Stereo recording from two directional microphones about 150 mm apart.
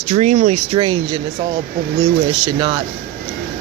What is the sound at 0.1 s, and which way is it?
Speech, 50° right (ahead or behind).